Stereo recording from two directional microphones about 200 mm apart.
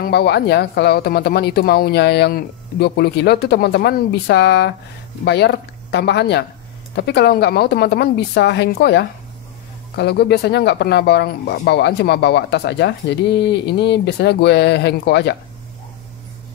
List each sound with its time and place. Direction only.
0.0 s speech: 55° left (ahead or behind)